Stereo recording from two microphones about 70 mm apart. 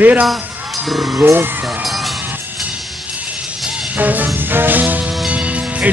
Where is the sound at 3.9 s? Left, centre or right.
Right.